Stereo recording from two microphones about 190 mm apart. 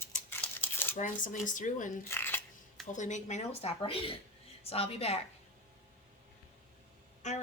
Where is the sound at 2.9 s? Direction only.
40° left (ahead or behind).